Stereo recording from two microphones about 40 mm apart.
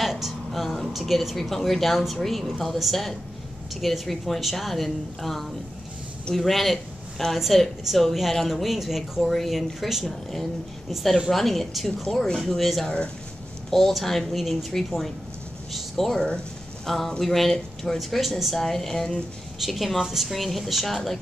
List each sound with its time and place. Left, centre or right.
0.0 s a woman's voice: centre
11.2 s speech: centre
12.8 s speech: left
13.7 s a woman's voice: centre
14.3 s speech: centre
17.9 s speech: centre
18.6 s speech: centre
19.6 s speech: centre